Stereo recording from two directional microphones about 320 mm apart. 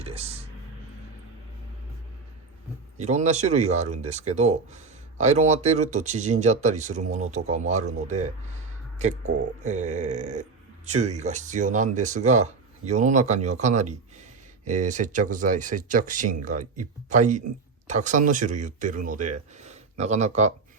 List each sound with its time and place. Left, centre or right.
0.0 s speech: centre
3.0 s speech: right